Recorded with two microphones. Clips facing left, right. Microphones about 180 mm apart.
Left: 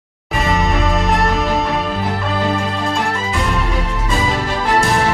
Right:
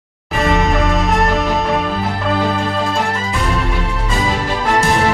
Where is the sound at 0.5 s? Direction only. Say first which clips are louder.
Right 1 dB; centre (ahead or behind).